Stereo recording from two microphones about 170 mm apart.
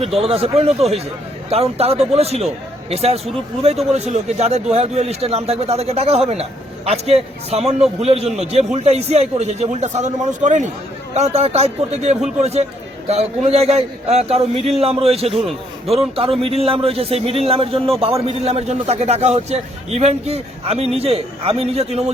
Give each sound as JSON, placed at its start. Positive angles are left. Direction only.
{"t": 0.0, "sound": "a man's voice", "side_deg": -35}